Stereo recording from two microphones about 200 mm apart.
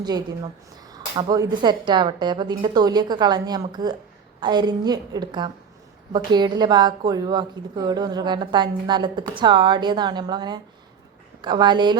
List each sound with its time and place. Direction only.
0.9 s a woman's voice: 20° right (ahead or behind)